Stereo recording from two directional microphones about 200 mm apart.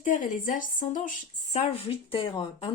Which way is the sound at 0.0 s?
40° left (ahead or behind).